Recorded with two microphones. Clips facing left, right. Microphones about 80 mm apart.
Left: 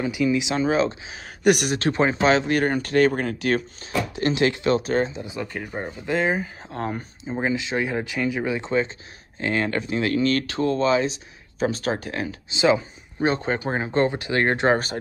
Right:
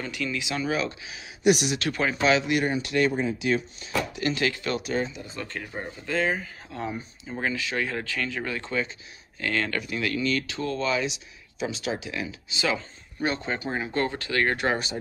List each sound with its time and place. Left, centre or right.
0.0 s speech: centre
0.4 s speech: left
1.2 s speech: left
1.8 s speech: left
3.1 s speech: left
4.1 s speech: left
5.2 s speech: centre
6.7 s speech: left
7.2 s speech: left
12.4 s speech: left
14.0 s speech: left